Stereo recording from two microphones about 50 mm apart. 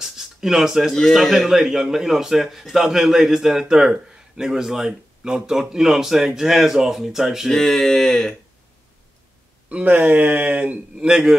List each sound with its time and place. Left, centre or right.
0.0 s a sound: centre
1.1 s speech: centre
7.5 s speech: centre
9.7 s speech: right
9.9 s speech: right
11.0 s speech: centre